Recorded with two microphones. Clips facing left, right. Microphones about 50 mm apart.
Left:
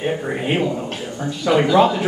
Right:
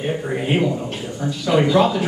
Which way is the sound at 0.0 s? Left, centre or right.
Centre.